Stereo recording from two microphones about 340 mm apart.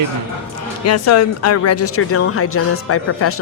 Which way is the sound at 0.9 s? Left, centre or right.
Left.